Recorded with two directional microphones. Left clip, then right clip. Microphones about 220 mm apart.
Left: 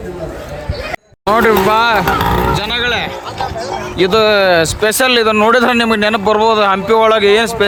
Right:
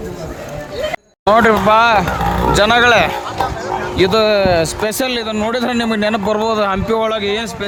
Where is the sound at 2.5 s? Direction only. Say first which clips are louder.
Right 5 dB; 20° right (ahead or behind).